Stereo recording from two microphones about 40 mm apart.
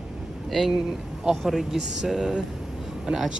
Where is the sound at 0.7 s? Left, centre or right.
Centre.